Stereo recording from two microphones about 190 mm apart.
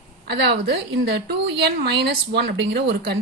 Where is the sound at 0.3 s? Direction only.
60° right (ahead or behind).